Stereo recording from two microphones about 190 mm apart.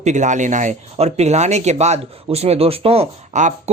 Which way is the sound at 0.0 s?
40° right (ahead or behind).